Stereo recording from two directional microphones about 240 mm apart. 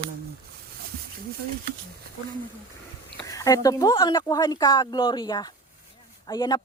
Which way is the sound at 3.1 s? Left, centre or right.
Centre.